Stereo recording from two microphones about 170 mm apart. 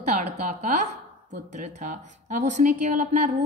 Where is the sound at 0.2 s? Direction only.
50° right (ahead or behind).